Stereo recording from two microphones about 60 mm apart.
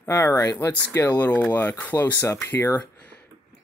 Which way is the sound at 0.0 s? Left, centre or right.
Left.